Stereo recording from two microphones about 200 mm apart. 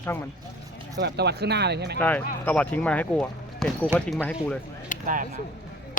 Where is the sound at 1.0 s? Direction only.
55° right (ahead or behind).